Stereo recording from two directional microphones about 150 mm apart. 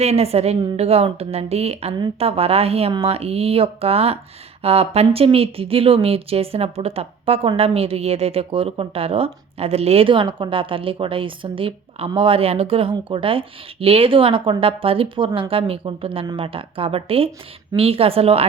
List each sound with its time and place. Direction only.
0.0 s a woman's voice: 45° right (ahead or behind)